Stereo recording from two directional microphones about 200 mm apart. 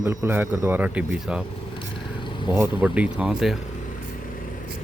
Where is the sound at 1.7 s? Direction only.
25° left (ahead or behind).